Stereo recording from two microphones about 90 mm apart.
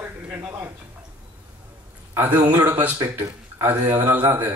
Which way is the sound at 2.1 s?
25° right (ahead or behind).